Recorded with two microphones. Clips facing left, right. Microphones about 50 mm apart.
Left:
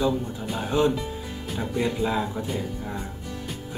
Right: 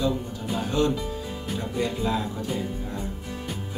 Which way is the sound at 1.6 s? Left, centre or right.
Centre.